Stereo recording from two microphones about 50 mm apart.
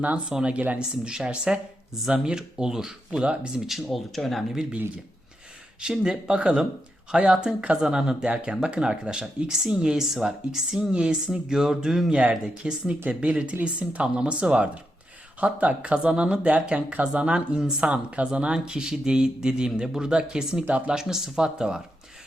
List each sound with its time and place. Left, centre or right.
0.3 s speech: centre
0.5 s speech: right
0.8 s speech: centre
3.7 s speech: centre
5.9 s speech: centre
13.1 s speech: right; by 20.7 s centre
20.7 s speech: right
20.9 s speech: centre